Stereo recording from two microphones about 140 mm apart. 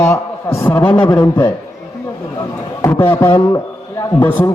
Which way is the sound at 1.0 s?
30° left (ahead or behind).